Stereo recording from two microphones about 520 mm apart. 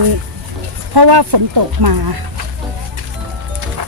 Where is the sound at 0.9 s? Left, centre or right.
Right.